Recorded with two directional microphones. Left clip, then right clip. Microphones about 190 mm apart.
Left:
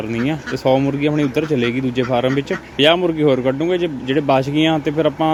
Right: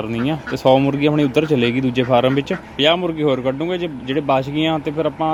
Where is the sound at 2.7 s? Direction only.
10° left (ahead or behind).